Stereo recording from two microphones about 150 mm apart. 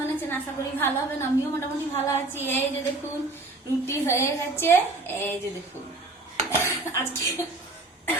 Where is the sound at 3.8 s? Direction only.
20° left (ahead or behind).